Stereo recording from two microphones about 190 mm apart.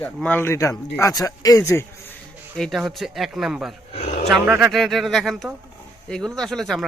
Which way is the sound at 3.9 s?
35° left (ahead or behind).